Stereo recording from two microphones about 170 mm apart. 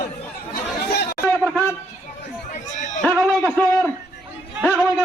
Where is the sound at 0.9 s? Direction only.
65° left (ahead or behind).